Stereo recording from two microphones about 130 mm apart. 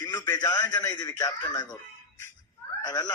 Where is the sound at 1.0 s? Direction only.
25° left (ahead or behind).